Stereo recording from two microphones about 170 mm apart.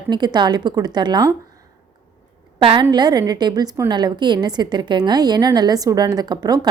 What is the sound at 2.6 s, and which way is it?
A woman's voice, 35° right (ahead or behind).